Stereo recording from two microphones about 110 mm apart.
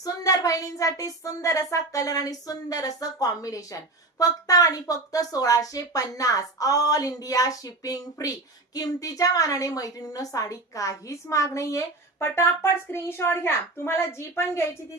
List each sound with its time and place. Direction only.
0.0 s a woman's voice: 35° left (ahead or behind)